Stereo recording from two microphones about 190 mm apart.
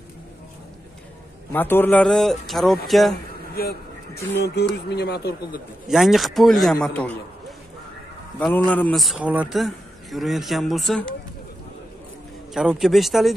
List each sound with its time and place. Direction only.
1.5 s a man's voice: 10° left (ahead or behind)
3.5 s vehicle: 55° left (ahead or behind)
4.6 s speech: 60° left (ahead or behind)
5.9 s a man's voice: centre (ahead or behind)
12.5 s a man's voice: centre (ahead or behind)